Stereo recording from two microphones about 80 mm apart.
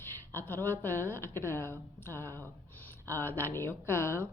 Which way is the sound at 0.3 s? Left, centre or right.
Left.